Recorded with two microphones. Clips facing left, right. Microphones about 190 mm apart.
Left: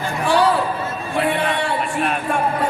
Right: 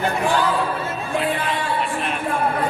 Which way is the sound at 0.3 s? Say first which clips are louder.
Left 6 dB; 70° left (ahead or behind).